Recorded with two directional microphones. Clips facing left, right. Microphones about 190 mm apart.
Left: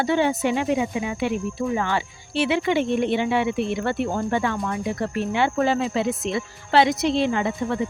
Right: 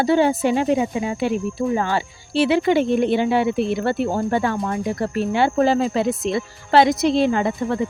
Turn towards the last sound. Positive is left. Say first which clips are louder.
# right 3 dB
turn(degrees=-40)  # may be behind; listen again after turning